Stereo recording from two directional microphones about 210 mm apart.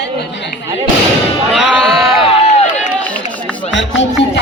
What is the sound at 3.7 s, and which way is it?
Speech, 60° left (ahead or behind).